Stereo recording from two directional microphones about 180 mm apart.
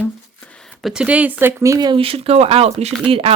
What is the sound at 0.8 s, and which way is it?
Speech, 5° right (ahead or behind).